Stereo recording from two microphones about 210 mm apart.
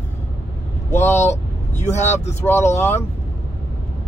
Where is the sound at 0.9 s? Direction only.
10° left (ahead or behind).